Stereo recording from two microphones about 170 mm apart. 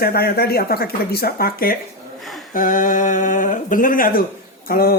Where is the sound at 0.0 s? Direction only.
65° left (ahead or behind).